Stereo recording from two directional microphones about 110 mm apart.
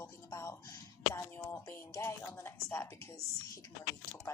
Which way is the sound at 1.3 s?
15° left (ahead or behind).